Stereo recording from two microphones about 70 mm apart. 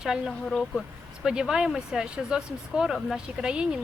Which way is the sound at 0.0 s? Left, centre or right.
Centre.